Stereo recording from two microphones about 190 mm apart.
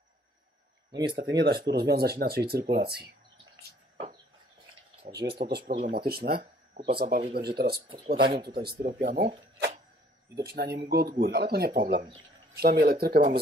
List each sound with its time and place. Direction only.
1.1 s speech: 55° right (ahead or behind)
5.1 s speech: 60° right (ahead or behind)
7.9 s speech: 25° right (ahead or behind)
8.4 s speech: 55° right (ahead or behind)
10.3 s speech: 55° right (ahead or behind)